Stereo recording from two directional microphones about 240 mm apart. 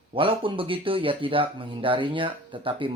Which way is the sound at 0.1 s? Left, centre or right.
Right.